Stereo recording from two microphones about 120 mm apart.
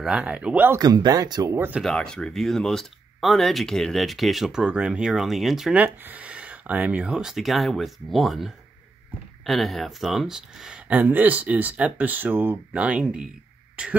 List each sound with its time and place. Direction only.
0.0 s speech: 10° right (ahead or behind)
0.7 s speech: 35° right (ahead or behind)
1.8 s speech: 5° left (ahead or behind)
5.8 s speech: 15° right (ahead or behind)